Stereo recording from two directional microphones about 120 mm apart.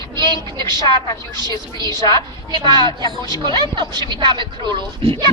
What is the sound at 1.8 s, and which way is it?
Speech, 30° left (ahead or behind).